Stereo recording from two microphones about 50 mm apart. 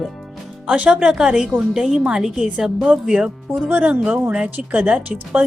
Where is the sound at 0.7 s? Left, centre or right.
Right.